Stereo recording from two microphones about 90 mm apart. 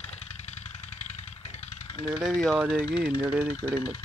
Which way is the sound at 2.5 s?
20° right (ahead or behind).